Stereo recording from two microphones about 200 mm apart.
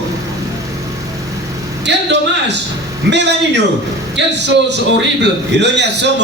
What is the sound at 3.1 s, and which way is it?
A man's voice, 60° right (ahead or behind).